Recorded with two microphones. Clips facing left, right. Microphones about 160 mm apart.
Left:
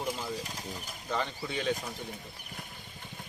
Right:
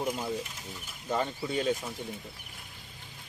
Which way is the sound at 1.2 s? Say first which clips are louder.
Right 4 dB; 40° right (ahead or behind).